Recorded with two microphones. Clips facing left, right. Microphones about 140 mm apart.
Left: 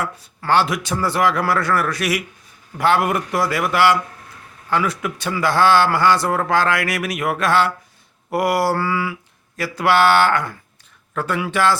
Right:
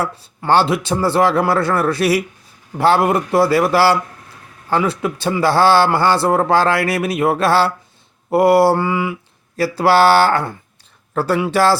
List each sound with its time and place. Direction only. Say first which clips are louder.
0.0 s a man's voice: right 4 dB; 30° right (ahead or behind)
9.6 s a man's voice: right 4 dB; 30° right (ahead or behind)